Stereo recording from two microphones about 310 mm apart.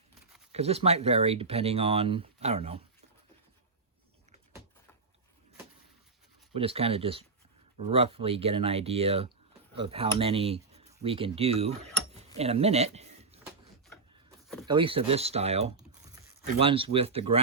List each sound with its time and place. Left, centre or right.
0.5 s speech: centre
6.5 s speech: centre
14.4 s a sound: centre
14.7 s speech: centre